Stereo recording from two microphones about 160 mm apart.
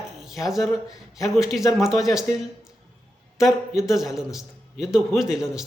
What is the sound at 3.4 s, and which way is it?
Speech, centre (ahead or behind).